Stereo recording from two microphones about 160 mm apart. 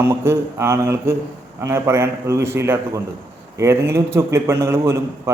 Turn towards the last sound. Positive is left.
turn(degrees=-15)  # may be behind; listen again after turning